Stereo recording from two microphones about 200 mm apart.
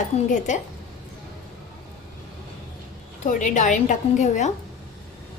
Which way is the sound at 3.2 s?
40° left (ahead or behind).